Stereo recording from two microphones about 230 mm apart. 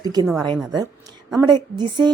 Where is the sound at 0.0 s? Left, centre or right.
Centre.